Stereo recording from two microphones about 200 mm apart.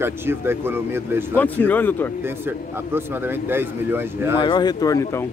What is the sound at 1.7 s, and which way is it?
Speech, 10° left (ahead or behind).